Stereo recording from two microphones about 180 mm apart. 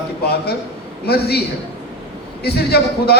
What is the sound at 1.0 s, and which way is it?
Speech, 60° left (ahead or behind).